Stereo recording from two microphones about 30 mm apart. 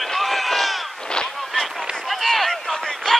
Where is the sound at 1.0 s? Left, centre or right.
Left.